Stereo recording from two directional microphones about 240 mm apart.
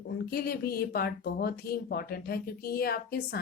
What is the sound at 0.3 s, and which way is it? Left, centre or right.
Speech, left.